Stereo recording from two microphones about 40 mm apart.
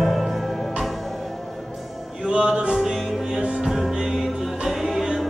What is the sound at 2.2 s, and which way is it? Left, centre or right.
Music, right.